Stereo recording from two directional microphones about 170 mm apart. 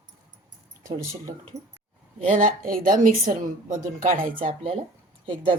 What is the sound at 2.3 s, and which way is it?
Speech, 50° right (ahead or behind).